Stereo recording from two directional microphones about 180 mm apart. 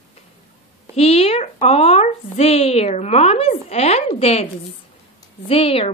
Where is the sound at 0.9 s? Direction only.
35° left (ahead or behind).